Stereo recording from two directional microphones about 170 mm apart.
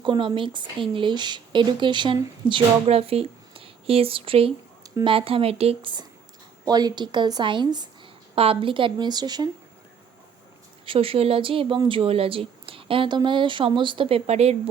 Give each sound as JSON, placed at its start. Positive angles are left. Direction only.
{"t": 0.0, "sound": "speech", "side_deg": -30}
{"t": 10.8, "sound": "speech", "side_deg": -35}